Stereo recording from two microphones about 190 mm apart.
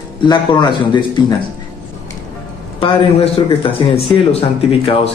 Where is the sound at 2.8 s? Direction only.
30° left (ahead or behind).